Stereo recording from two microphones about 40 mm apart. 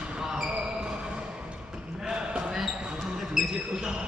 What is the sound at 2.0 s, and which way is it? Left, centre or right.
Basketball bounce, right.